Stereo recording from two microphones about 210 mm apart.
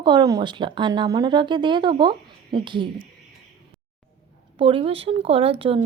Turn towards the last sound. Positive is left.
turn(degrees=-25)  # may be behind; listen again after turning